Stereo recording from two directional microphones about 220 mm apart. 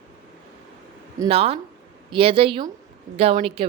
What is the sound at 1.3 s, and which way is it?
A woman's voice, 30° right (ahead or behind).